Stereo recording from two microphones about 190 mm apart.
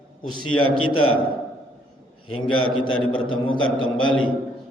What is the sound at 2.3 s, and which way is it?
A man's voice, 90° left.